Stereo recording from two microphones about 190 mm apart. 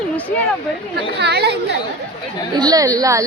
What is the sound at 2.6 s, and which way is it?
Speech, 20° right (ahead or behind).